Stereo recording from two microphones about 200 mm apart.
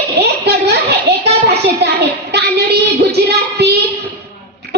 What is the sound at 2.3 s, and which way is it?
Child singing, 55° right (ahead or behind).